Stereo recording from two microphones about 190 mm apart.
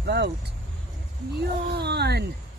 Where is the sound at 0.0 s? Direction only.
60° right (ahead or behind).